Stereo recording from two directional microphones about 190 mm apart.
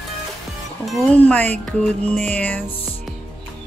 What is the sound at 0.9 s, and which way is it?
Speech, centre (ahead or behind).